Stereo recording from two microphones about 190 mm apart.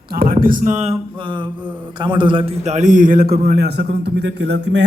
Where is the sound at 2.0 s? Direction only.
25° right (ahead or behind).